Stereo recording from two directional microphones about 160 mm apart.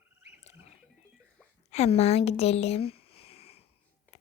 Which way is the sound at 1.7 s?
40° left (ahead or behind).